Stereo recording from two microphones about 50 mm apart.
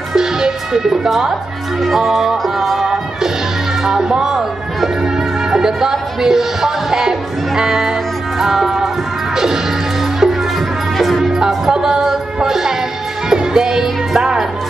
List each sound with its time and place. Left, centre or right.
0.1 s music: centre
3.8 s speech: centre
8.4 s music: centre
11.3 s music: centre